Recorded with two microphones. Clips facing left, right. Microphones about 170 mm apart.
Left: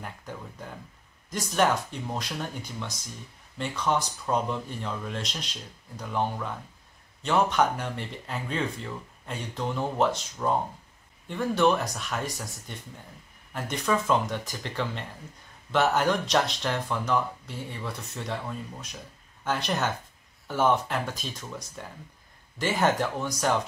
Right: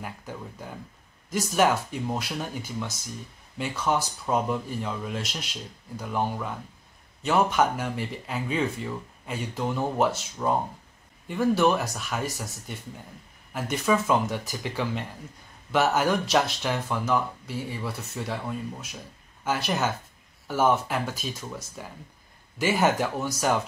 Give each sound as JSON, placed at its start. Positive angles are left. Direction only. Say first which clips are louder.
{"t": 0.3, "sound": "speech", "louder": "right 2 dB", "side_deg": -5}
{"t": 3.5, "sound": "speech", "louder": "right 1 dB", "side_deg": -5}